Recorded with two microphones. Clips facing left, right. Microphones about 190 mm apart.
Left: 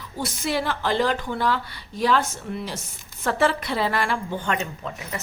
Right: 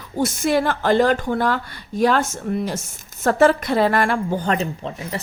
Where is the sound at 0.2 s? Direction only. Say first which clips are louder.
Right 7 dB; 45° right (ahead or behind).